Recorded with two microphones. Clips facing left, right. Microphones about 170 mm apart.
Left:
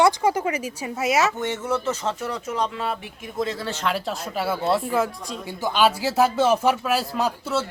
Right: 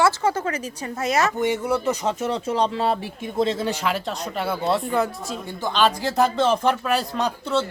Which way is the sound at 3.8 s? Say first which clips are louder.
Right 1 dB; centre (ahead or behind).